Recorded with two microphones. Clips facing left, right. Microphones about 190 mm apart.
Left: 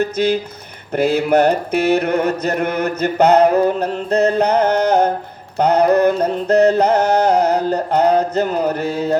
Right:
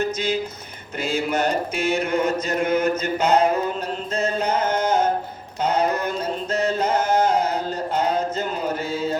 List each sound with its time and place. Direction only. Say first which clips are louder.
0.0 s mantra: left 6 dB; 60° left (ahead or behind)
5.5 s music: left 9 dB; 60° left (ahead or behind)